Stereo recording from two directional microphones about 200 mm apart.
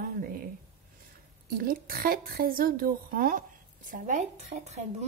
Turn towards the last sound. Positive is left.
turn(degrees=-35)  # may be behind; listen again after turning